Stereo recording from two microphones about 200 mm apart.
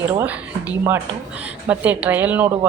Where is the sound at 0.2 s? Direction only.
5° right (ahead or behind).